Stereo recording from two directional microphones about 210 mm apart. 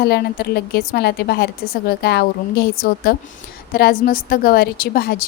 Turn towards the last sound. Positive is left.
turn(degrees=50)  # may be behind; listen again after turning